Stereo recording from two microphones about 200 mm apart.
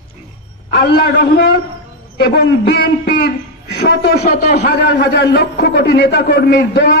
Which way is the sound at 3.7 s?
55° left (ahead or behind).